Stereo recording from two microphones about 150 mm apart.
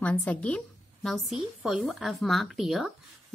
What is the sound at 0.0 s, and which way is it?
A woman's voice, 10° left (ahead or behind).